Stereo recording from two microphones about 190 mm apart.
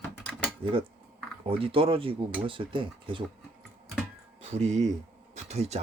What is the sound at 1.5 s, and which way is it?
Speech, 30° right (ahead or behind).